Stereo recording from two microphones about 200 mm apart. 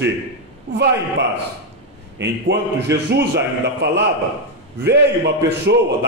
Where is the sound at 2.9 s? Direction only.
15° right (ahead or behind).